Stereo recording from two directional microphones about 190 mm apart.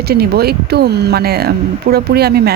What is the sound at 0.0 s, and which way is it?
Speech, 55° right (ahead or behind).